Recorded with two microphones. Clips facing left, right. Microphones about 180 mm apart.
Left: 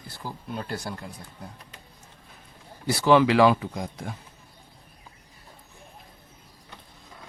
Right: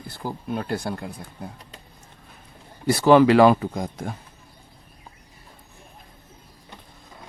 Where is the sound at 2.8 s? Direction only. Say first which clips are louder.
Right 4 dB; 45° right (ahead or behind).